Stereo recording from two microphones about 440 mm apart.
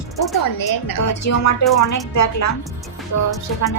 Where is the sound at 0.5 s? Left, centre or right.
Left.